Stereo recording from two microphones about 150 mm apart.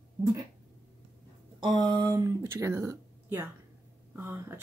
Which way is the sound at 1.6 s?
30° right (ahead or behind).